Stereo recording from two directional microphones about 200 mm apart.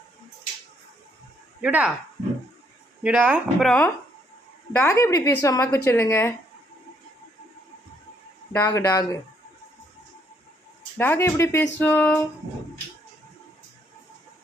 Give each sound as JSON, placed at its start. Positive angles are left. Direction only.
{"t": 1.6, "sound": "speech", "side_deg": -10}
{"t": 3.0, "sound": "a woman's voice", "side_deg": -5}
{"t": 8.5, "sound": "a woman's voice", "side_deg": 15}
{"t": 10.9, "sound": "a woman's voice", "side_deg": 10}